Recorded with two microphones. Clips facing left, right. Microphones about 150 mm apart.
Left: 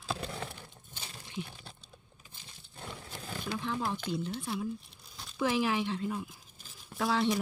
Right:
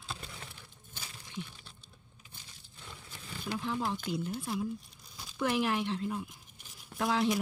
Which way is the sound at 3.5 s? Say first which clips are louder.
Right 1 dB; 5° right (ahead or behind).